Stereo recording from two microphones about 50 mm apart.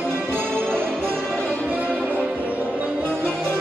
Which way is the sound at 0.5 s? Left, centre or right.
Right.